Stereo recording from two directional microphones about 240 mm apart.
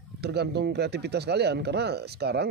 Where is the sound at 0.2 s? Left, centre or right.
Right.